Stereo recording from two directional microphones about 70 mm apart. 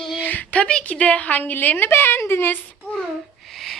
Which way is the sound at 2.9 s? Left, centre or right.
Centre.